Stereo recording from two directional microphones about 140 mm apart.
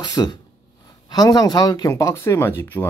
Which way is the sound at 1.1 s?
25° left (ahead or behind).